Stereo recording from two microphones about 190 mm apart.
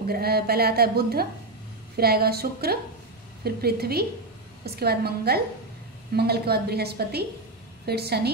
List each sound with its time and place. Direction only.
0.1 s a woman's voice: 55° right (ahead or behind)